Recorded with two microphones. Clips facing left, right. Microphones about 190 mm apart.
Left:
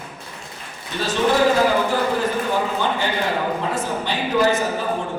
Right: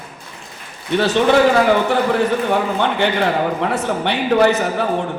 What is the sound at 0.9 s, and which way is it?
Speech, 70° right (ahead or behind).